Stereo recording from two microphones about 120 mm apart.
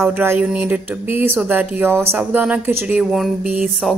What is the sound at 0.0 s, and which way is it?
Speech, 20° right (ahead or behind).